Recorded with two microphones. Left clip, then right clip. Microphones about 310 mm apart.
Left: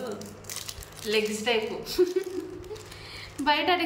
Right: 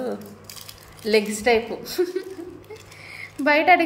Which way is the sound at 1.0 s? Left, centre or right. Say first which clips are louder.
Right 7 dB; centre.